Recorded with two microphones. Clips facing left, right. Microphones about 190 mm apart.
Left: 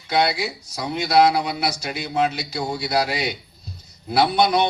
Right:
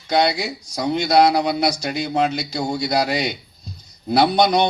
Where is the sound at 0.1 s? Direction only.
35° right (ahead or behind).